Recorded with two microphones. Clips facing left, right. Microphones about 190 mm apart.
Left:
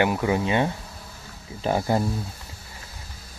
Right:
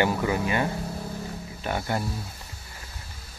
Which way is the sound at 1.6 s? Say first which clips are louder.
Left 6 dB; 30° left (ahead or behind).